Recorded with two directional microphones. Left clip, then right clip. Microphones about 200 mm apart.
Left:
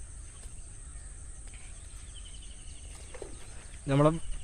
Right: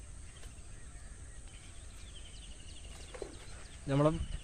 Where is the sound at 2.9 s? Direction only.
10° left (ahead or behind).